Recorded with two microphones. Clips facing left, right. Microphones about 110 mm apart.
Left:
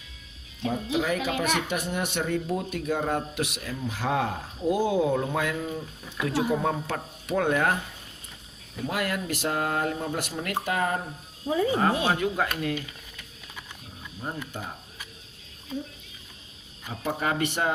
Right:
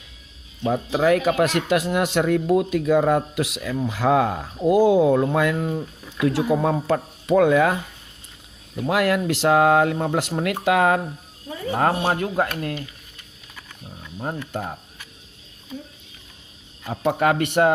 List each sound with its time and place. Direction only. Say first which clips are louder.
0.7 s a man's voice: right 8 dB; 90° right; by 5.8 s 60° right (ahead or behind)
6.2 s a man's voice: right 6 dB; 90° right
8.9 s speech: right 9 dB; 75° right (ahead or behind)
11.7 s speech: right 9 dB; 50° right (ahead or behind)
14.2 s speech: right 6 dB; 60° right (ahead or behind)
16.9 s speech: right 8 dB; 60° right (ahead or behind)